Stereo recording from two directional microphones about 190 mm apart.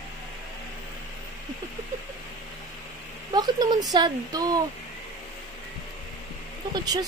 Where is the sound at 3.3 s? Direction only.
20° right (ahead or behind).